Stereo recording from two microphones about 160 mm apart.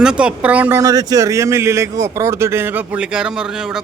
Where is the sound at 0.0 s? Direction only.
5° right (ahead or behind).